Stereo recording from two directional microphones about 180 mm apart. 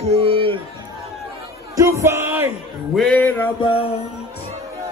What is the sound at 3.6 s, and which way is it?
Music, 30° left (ahead or behind).